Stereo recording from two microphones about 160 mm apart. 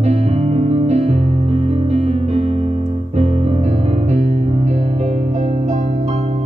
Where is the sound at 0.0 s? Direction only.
40° right (ahead or behind).